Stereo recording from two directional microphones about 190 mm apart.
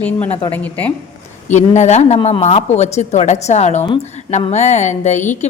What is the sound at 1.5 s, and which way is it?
Speech, 35° left (ahead or behind).